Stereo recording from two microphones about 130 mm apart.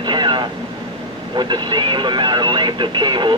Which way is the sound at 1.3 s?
35° right (ahead or behind).